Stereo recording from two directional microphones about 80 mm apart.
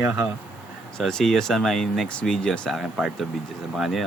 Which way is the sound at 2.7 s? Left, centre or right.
Centre.